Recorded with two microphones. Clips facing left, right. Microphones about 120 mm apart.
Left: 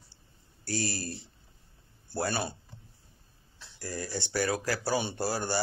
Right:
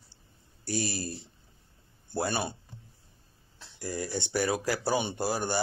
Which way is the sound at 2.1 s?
20° right (ahead or behind).